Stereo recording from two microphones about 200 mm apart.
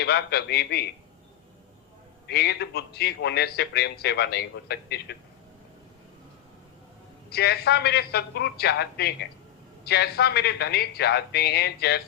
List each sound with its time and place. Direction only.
0.0 s speech: 55° left (ahead or behind)
2.2 s a man's voice: 55° left (ahead or behind)
7.3 s a man's voice: 55° left (ahead or behind)